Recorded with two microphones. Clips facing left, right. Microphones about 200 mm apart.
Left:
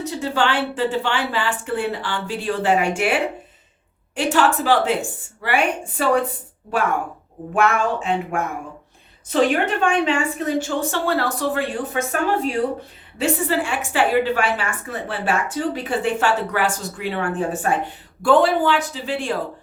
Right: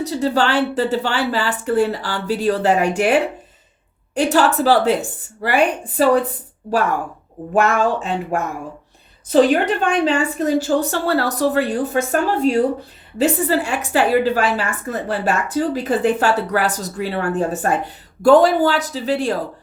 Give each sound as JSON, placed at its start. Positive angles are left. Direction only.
{"t": 0.0, "sound": "a woman's voice", "side_deg": -40}
{"t": 7.5, "sound": "a woman's voice", "side_deg": -40}
{"t": 13.1, "sound": "a woman's voice", "side_deg": -40}